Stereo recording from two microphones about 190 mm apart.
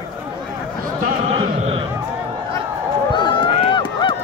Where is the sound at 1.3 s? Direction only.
30° right (ahead or behind).